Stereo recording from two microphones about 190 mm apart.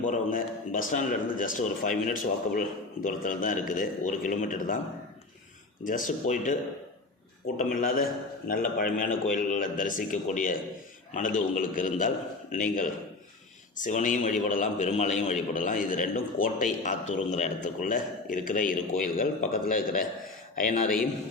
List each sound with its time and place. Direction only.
0.1 s a man's voice: 45° left (ahead or behind)
5.8 s a man's voice: 45° left (ahead or behind)